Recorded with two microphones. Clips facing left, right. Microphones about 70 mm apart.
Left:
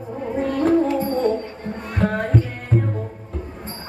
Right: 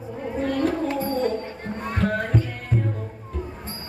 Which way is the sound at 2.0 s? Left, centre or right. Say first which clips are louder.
Left 3 dB; left.